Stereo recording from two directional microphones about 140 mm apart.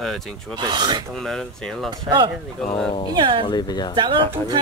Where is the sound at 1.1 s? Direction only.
5° left (ahead or behind).